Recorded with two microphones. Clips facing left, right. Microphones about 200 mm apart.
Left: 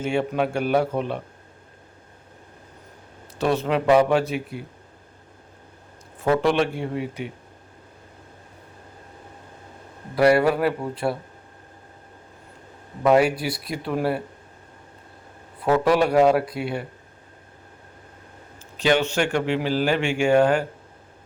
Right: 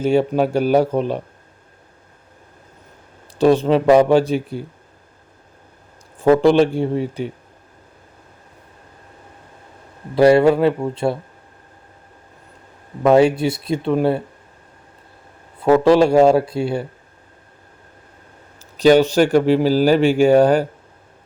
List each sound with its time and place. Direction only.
0.0 s speech: 35° right (ahead or behind)
3.3 s speech: 30° right (ahead or behind)
6.1 s speech: 30° right (ahead or behind)
10.2 s speech: 25° right (ahead or behind)
13.1 s speech: 25° right (ahead or behind)
15.6 s speech: 25° right (ahead or behind)
18.8 s speech: 40° right (ahead or behind)